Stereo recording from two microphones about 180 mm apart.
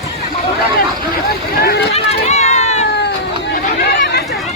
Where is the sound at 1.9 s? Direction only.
35° left (ahead or behind).